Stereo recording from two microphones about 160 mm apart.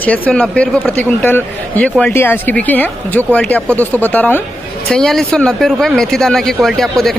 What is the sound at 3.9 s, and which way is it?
Speech, 10° left (ahead or behind).